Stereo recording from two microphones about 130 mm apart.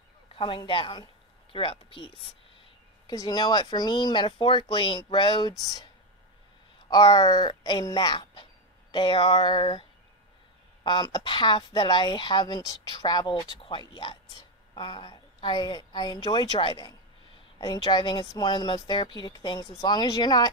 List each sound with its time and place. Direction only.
0.3 s speech: 40° left (ahead or behind)
3.1 s speech: 30° left (ahead or behind)
6.9 s speech: 35° left (ahead or behind)